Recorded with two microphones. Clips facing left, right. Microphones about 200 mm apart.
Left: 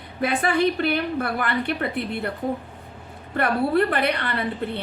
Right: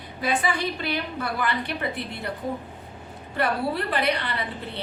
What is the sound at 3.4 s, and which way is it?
Speech, 55° left (ahead or behind).